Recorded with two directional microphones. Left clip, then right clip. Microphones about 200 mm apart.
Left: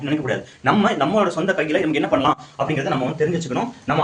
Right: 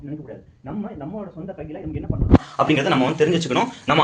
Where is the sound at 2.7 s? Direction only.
Centre (ahead or behind).